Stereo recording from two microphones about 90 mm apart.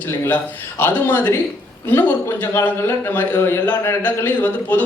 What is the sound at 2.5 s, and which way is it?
A man's voice, 30° left (ahead or behind).